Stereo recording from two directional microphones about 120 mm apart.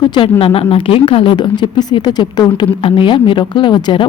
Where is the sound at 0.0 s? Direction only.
40° left (ahead or behind).